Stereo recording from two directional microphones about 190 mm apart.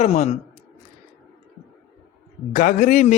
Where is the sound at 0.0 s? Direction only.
35° left (ahead or behind).